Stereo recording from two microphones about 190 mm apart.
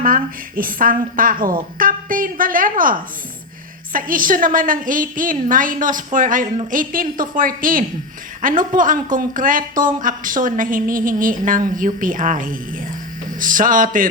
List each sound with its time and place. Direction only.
0.0 s speech: 45° right (ahead or behind)